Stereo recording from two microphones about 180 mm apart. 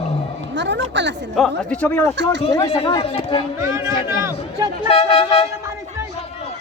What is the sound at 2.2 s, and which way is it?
Speech, 75° right (ahead or behind).